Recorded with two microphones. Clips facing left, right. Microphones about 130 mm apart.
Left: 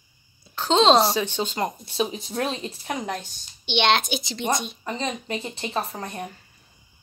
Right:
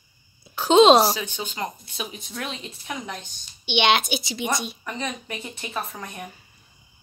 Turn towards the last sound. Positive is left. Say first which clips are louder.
# left 3 dB
turn(degrees=30)  # may be behind; listen again after turning